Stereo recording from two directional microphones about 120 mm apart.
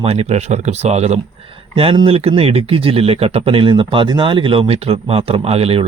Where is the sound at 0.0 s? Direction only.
60° right (ahead or behind).